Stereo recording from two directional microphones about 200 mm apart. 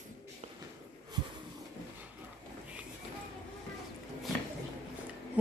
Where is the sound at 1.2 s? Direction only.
20° right (ahead or behind).